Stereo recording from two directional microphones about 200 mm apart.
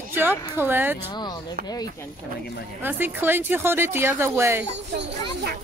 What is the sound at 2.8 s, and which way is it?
A woman's voice, 10° right (ahead or behind).